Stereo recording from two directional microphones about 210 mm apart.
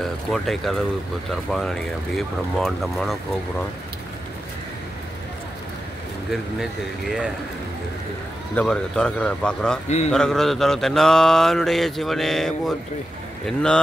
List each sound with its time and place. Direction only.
0.0 s mantra: centre (ahead or behind)
6.3 s mantra: centre (ahead or behind)
8.5 s mantra: 5° left (ahead or behind)
9.8 s a man's voice: 30° left (ahead or behind)
10.1 s mantra: centre (ahead or behind)